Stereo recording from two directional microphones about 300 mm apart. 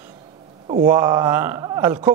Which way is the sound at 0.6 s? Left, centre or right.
Centre.